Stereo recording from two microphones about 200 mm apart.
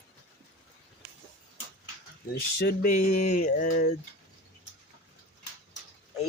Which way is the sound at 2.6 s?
50° left (ahead or behind).